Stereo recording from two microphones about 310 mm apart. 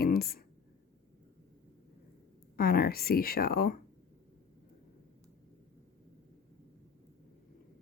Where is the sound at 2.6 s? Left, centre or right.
Left.